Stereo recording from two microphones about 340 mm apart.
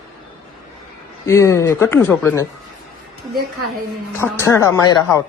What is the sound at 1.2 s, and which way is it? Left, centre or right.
Speech, centre.